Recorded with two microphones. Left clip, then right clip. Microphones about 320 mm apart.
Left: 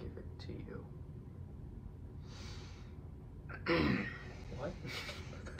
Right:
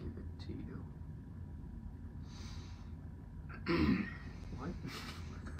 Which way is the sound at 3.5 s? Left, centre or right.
Centre.